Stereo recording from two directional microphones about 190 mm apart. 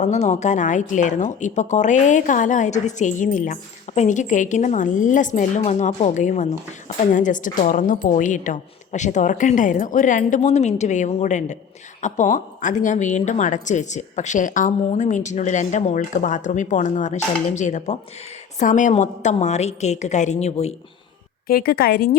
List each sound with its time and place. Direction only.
0.0 s a woman's voice: 40° left (ahead or behind)
21.4 s speech: 50° left (ahead or behind)